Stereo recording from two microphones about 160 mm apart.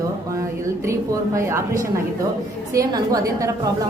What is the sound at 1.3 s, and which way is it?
A woman's voice, 20° right (ahead or behind).